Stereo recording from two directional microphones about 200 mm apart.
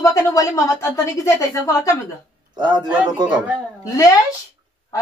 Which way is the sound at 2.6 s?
20° right (ahead or behind).